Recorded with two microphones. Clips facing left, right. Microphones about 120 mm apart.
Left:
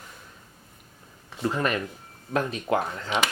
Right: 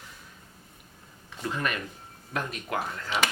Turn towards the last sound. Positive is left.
turn(degrees=25)  # may be behind; listen again after turning